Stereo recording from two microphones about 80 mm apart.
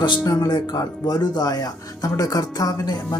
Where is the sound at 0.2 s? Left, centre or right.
Left.